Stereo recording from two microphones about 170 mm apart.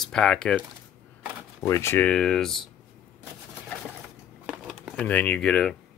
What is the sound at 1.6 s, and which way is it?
Speech, 15° left (ahead or behind).